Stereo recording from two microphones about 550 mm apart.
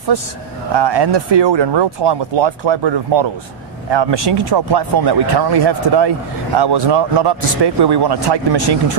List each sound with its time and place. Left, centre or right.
0.7 s speech: right